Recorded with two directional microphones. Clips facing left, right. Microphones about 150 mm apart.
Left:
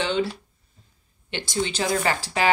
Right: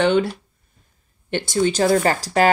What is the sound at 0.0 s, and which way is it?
Speech, 55° right (ahead or behind).